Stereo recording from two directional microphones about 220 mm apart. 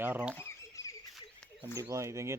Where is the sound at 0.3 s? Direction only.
10° left (ahead or behind).